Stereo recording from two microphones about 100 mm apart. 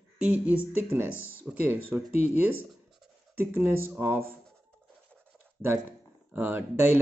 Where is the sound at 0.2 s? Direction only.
15° right (ahead or behind).